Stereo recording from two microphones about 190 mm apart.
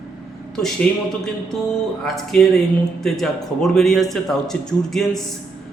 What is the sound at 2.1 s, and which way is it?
Speech, centre (ahead or behind).